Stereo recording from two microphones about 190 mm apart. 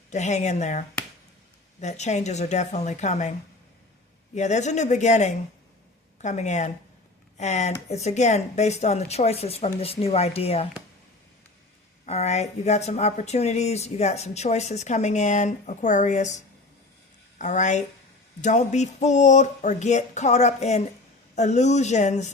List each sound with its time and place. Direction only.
0.1 s speech: 40° left (ahead or behind)
4.4 s speech: 40° left (ahead or behind)
12.0 s speech: 35° left (ahead or behind)
17.3 s speech: 40° left (ahead or behind)